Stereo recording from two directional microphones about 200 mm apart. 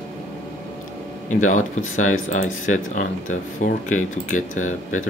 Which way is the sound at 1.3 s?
40° left (ahead or behind).